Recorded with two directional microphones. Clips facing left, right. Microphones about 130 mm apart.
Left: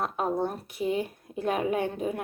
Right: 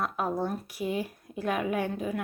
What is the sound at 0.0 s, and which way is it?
A woman's voice, 30° left (ahead or behind).